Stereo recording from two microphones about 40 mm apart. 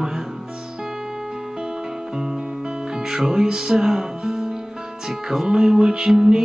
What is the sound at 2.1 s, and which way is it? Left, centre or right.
Music, centre.